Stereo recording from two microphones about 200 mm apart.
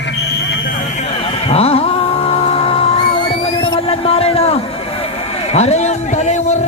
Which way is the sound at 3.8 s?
30° left (ahead or behind).